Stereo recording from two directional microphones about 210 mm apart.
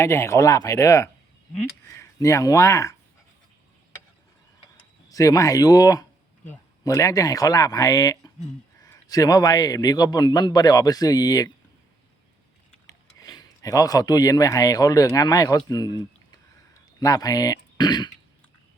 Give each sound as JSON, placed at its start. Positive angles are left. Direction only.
{"t": 0.0, "sound": "a man's voice", "side_deg": 10}
{"t": 5.0, "sound": "a man's voice", "side_deg": 15}
{"t": 12.9, "sound": "speech", "side_deg": 15}
{"t": 17.0, "sound": "a man's voice", "side_deg": 15}